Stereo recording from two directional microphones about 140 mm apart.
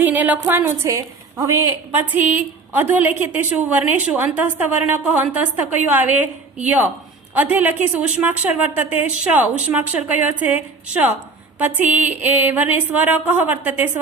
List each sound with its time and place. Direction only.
0.0 s a woman's voice: 10° right (ahead or behind)
7.3 s a woman's voice: 10° right (ahead or behind)
11.6 s a woman's voice: 10° right (ahead or behind)